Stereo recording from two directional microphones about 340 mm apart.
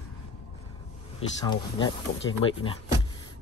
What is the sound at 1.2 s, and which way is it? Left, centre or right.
Speech, centre.